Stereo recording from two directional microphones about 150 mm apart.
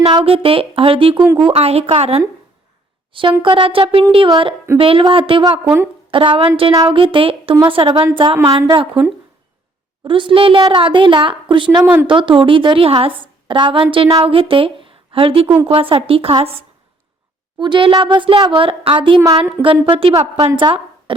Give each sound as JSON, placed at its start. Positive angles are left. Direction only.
{"t": 0.1, "sound": "a woman's voice", "side_deg": -35}
{"t": 10.0, "sound": "a woman's voice", "side_deg": -35}